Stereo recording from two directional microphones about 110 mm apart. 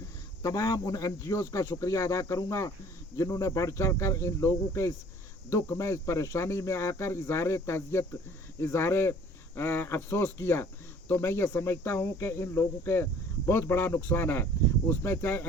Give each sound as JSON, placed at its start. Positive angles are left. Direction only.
{"t": 0.4, "sound": "speech", "side_deg": 35}